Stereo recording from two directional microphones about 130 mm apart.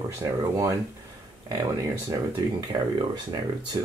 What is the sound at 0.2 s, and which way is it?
Speech, 25° right (ahead or behind).